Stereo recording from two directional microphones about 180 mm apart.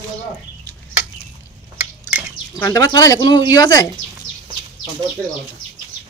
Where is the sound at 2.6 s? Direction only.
20° left (ahead or behind).